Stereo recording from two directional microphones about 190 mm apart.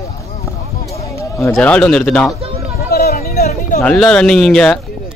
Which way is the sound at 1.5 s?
5° left (ahead or behind).